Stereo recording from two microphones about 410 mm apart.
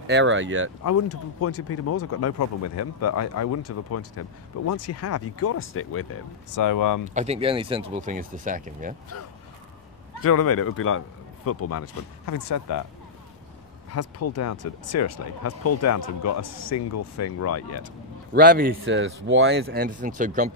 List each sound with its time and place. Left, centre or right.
0.0 s speech: right
0.8 s speech: left
6.5 s speech: left
7.2 s speech: centre
9.1 s speech: left
13.9 s speech: left
18.3 s speech: right